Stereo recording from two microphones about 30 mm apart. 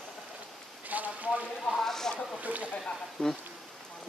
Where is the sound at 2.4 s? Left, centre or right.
Right.